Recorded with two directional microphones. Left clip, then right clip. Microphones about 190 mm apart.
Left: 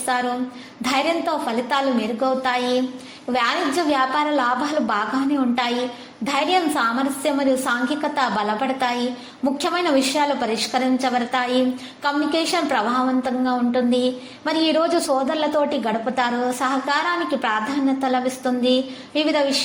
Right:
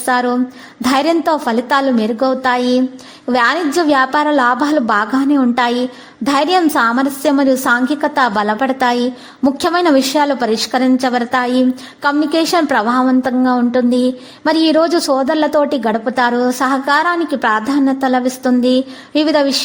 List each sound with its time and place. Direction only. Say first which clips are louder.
0.1 s a woman's voice: right 8 dB; 40° right (ahead or behind)